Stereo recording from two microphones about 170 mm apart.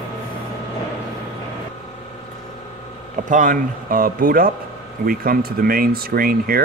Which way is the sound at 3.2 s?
50° right (ahead or behind).